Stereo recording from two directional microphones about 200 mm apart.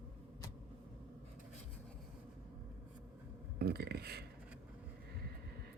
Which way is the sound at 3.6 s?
55° right (ahead or behind).